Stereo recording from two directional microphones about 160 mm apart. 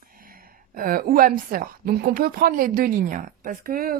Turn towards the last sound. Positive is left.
turn(degrees=-65)  # may be behind; listen again after turning